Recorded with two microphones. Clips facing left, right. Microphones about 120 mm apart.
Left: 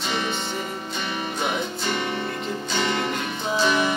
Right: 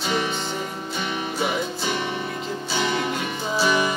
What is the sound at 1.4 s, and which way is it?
Music, 5° right (ahead or behind).